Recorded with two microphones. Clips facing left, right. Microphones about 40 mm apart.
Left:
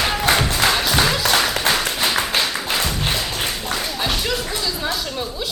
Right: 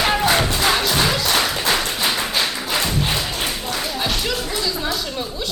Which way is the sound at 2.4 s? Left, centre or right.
Centre.